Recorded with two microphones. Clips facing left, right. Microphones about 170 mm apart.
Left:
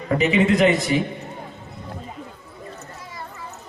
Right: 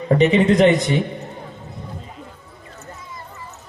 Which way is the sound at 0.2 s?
35° right (ahead or behind).